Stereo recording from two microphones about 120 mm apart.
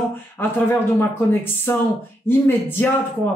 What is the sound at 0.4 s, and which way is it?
A man's voice, 15° left (ahead or behind).